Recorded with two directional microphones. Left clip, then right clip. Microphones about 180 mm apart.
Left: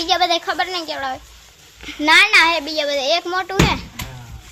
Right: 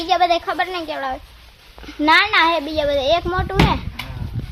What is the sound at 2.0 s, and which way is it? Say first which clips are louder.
Speech: left 2 dB; 25° right (ahead or behind).